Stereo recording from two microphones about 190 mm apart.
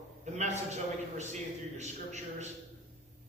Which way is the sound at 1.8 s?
35° right (ahead or behind).